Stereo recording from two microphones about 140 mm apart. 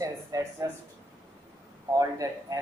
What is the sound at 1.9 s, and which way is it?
Speech, 25° right (ahead or behind).